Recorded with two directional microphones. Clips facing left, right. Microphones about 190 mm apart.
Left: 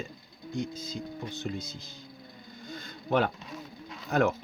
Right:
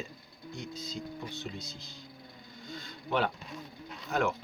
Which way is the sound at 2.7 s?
45° left (ahead or behind).